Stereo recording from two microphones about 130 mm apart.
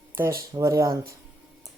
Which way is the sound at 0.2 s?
25° right (ahead or behind).